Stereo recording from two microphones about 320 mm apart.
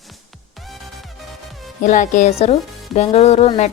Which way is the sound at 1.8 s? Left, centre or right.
Left.